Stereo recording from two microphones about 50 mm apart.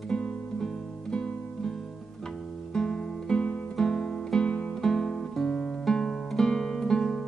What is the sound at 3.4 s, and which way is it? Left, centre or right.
Music, left.